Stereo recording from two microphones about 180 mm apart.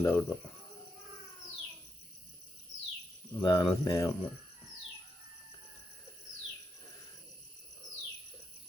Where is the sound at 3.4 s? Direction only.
25° left (ahead or behind).